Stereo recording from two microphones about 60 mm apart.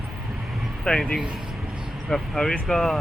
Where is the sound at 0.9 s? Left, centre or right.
Centre.